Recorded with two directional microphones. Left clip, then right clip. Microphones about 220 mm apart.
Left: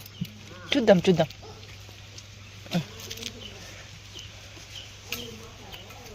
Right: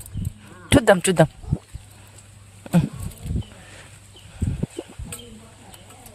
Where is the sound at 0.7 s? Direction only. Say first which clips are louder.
Right 4 dB; 50° right (ahead or behind).